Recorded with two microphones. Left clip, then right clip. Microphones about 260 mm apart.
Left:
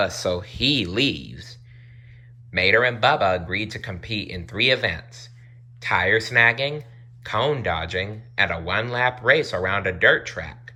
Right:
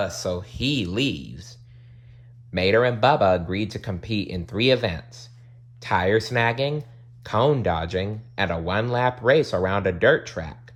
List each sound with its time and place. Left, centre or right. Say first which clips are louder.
0.0 s speech: left 3 dB; centre